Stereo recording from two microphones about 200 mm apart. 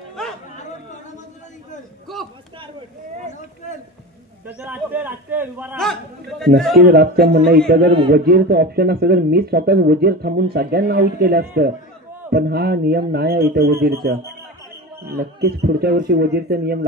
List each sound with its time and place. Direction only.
0.2 s a sound: 5° left (ahead or behind)
4.5 s a man's voice: 5° right (ahead or behind)
5.8 s a man's voice: centre (ahead or behind)
6.8 s speech: 50° right (ahead or behind)